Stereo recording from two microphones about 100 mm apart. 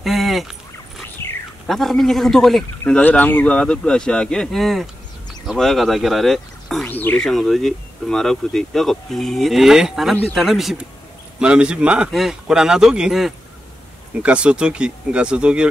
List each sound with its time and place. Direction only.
0.0 s a sound: centre (ahead or behind)
1.2 s a sound: 25° left (ahead or behind)
1.7 s speech: centre (ahead or behind)
2.9 s speech: 15° left (ahead or behind)
6.9 s speech: 20° left (ahead or behind)
7.2 s speech: 5° left (ahead or behind)